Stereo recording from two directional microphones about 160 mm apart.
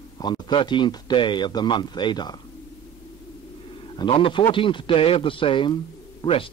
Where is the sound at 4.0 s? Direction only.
35° left (ahead or behind).